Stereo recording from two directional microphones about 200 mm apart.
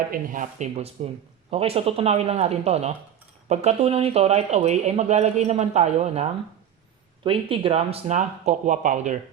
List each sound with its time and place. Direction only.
0.1 s speech: 40° right (ahead or behind)